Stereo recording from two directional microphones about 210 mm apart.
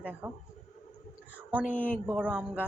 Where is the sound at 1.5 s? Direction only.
5° right (ahead or behind).